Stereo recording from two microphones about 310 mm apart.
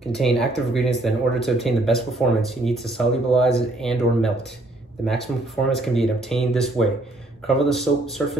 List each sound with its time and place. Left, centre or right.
0.1 s speech: centre